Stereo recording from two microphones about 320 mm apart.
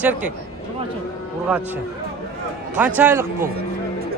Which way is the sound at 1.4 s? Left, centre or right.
Centre.